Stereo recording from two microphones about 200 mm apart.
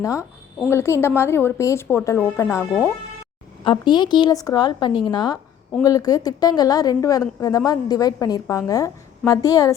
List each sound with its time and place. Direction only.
0.0 s speech: 15° left (ahead or behind)
3.6 s a woman's voice: 25° left (ahead or behind)